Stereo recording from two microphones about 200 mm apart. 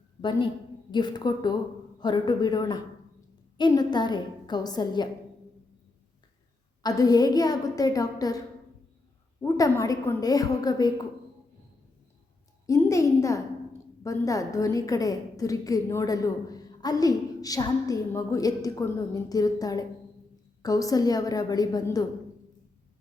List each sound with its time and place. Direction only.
0.2 s a woman's voice: 25° left (ahead or behind)
6.8 s a woman's voice: 20° left (ahead or behind)
9.4 s a woman's voice: 15° left (ahead or behind)
12.6 s a child's voice: 15° left (ahead or behind)